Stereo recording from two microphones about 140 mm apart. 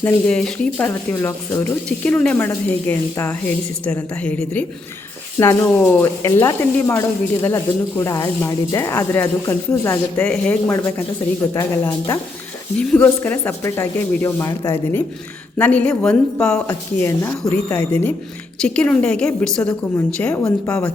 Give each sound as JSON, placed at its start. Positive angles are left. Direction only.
{"t": 0.0, "sound": "speech", "side_deg": 5}
{"t": 16.6, "sound": "speech", "side_deg": 20}